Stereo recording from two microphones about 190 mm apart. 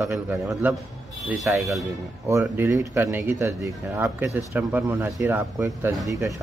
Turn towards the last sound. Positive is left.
turn(degrees=-15)  # may be behind; listen again after turning